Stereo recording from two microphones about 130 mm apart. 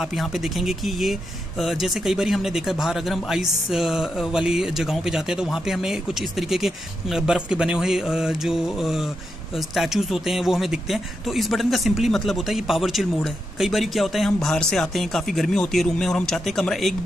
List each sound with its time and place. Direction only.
0.0 s speech: centre (ahead or behind)